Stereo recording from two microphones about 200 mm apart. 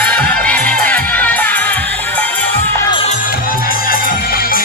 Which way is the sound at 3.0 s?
45° left (ahead or behind).